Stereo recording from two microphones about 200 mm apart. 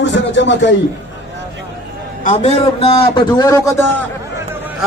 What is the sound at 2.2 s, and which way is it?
A man's voice, 35° left (ahead or behind).